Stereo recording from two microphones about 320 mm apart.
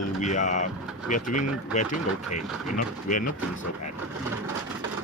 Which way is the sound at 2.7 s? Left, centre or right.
Left.